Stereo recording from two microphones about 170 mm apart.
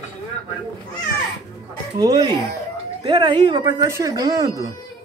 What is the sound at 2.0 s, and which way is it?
Speech, 25° right (ahead or behind).